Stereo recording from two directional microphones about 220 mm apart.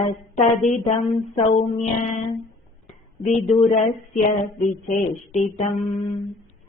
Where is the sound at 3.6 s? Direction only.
30° left (ahead or behind).